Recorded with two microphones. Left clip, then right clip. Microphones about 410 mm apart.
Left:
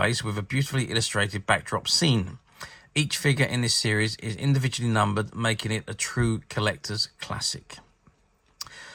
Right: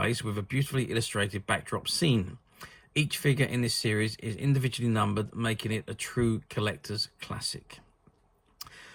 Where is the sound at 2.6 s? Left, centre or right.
Centre.